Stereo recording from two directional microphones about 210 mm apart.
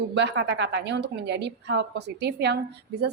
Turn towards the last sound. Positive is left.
turn(degrees=-50)  # may be behind; listen again after turning